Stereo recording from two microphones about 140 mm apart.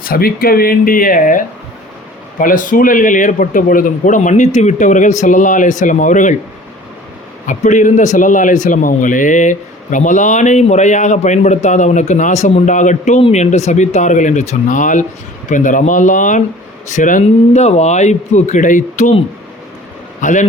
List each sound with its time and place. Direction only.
0.0 s a man's voice: 90° left; by 6.3 s 65° left (ahead or behind)
7.4 s a man's voice: 60° left (ahead or behind)
20.2 s a man's voice: 60° left (ahead or behind)